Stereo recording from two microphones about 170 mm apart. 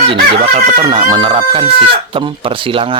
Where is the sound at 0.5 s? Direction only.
30° right (ahead or behind).